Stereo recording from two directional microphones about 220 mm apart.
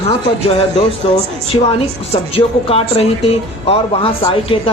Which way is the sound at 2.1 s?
25° left (ahead or behind).